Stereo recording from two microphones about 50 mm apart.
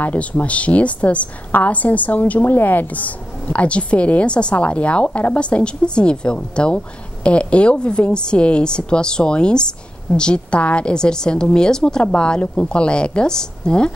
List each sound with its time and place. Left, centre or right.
0.0 s a woman's voice: left
2.4 s a woman's voice: left; by 13.9 s centre